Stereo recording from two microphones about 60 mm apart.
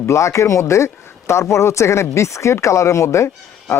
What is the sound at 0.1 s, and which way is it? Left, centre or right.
Speech, left.